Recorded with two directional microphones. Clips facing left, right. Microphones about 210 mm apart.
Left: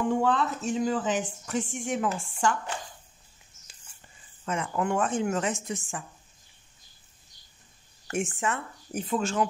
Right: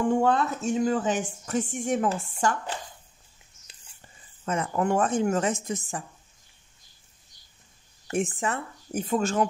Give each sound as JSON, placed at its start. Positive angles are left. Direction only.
{"t": 0.2, "sound": "speech", "side_deg": -45}
{"t": 4.5, "sound": "speech", "side_deg": -40}
{"t": 8.1, "sound": "speech", "side_deg": -35}